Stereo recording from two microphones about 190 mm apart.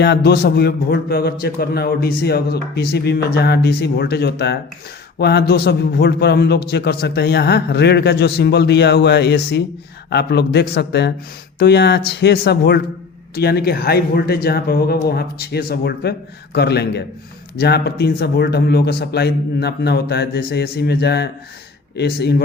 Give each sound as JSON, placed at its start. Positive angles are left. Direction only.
{"t": 0.0, "sound": "speech", "side_deg": 60}